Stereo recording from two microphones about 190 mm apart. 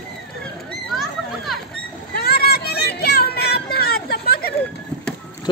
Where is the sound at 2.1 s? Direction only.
55° left (ahead or behind).